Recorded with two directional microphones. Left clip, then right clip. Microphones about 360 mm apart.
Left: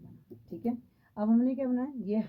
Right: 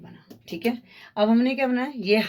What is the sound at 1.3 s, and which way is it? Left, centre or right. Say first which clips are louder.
Speech: right 7 dB; centre.